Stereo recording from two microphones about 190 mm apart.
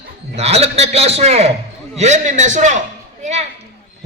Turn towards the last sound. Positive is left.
turn(degrees=-35)  # may be behind; listen again after turning